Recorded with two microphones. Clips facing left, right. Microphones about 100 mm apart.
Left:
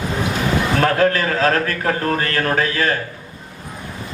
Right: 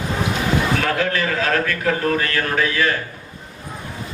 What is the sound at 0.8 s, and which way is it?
A man's voice, 40° left (ahead or behind).